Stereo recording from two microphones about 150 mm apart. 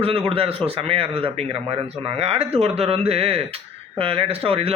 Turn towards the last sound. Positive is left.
turn(degrees=-40)  # may be behind; listen again after turning